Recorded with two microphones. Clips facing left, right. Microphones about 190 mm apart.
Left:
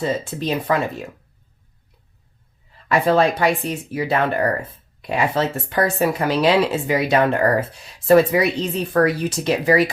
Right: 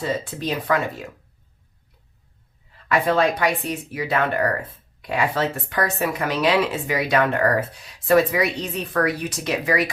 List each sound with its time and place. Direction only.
0.3 s speech: 25° left (ahead or behind)
2.9 s speech: 30° left (ahead or behind)